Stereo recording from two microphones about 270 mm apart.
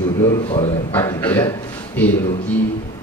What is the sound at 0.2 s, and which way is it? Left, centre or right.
A man's voice, centre.